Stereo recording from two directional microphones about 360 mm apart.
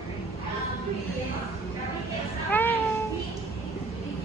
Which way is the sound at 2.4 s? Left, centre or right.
Centre.